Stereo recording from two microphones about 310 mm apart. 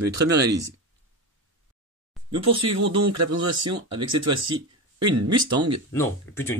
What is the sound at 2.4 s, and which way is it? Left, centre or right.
Speech, centre.